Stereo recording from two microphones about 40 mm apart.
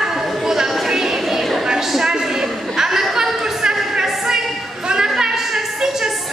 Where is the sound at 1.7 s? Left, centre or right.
Centre.